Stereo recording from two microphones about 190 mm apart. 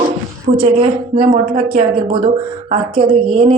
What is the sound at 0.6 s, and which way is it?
A woman's voice, 30° right (ahead or behind).